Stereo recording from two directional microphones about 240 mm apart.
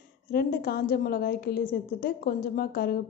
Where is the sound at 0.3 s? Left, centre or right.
Left.